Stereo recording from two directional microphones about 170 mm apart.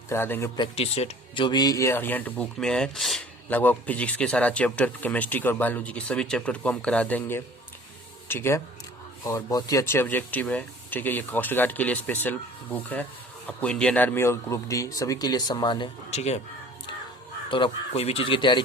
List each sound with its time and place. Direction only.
0.1 s speech: 15° left (ahead or behind)
0.6 s speech: 35° left (ahead or behind)
1.5 s speech: 25° left (ahead or behind)
16.0 s speech: 40° left (ahead or behind)
17.5 s speech: 35° left (ahead or behind)